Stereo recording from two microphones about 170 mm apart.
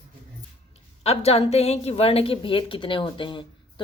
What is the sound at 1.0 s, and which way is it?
A woman's voice, 35° left (ahead or behind).